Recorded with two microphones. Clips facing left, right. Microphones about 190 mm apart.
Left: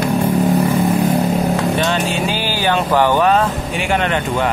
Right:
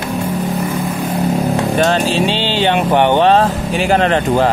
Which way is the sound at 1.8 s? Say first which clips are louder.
Right 4 dB; 35° right (ahead or behind).